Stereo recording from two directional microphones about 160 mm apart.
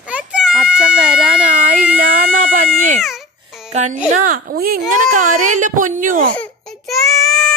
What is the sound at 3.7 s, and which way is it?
Speech, 45° right (ahead or behind).